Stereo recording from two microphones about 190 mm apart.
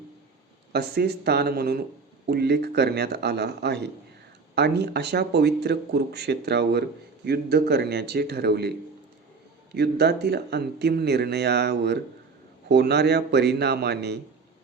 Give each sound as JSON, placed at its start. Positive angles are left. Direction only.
{"t": 0.7, "sound": "speech", "side_deg": -60}
{"t": 9.7, "sound": "speech", "side_deg": -60}